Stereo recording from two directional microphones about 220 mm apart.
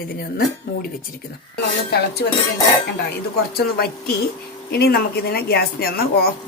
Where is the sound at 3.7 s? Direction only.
45° left (ahead or behind).